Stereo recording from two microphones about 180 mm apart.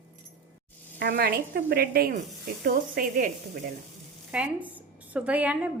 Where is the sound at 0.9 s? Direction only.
60° right (ahead or behind).